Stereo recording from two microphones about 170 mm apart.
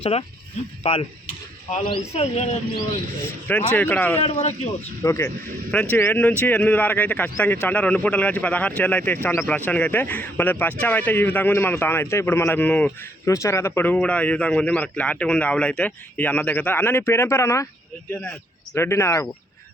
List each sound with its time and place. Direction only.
0.0 s speech: 35° left (ahead or behind)
3.7 s speech: 10° left (ahead or behind)
4.2 s speech: 40° left (ahead or behind)
5.0 s speech: 15° left (ahead or behind)